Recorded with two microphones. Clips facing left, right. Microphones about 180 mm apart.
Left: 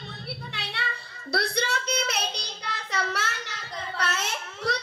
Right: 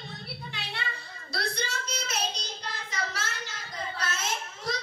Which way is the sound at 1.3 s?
65° left (ahead or behind).